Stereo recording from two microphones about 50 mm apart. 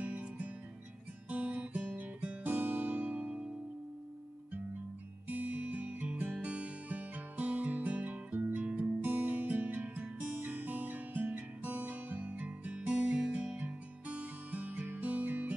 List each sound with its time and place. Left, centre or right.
1.3 s guitar: right
1.9 s music: right
5.3 s music: right
12.7 s music: right